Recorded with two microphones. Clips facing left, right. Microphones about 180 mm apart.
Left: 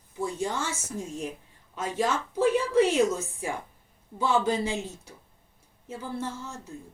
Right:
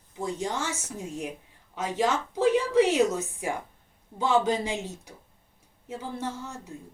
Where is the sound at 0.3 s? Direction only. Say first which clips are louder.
Even; 15° right (ahead or behind).